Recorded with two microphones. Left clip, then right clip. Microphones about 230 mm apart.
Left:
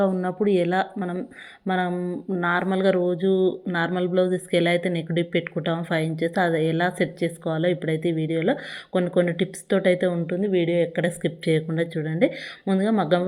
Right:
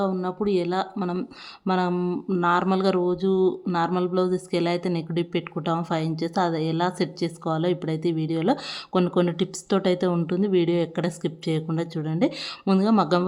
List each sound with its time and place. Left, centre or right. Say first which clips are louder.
0.0 s speech: left 3 dB; centre
1.9 s speech: right 2 dB; centre
2.4 s speech: even; centre